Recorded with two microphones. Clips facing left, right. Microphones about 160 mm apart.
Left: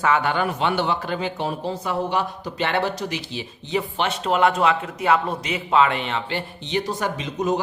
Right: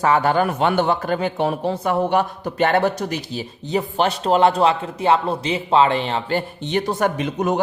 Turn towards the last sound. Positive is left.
turn(degrees=-60)  # may be behind; listen again after turning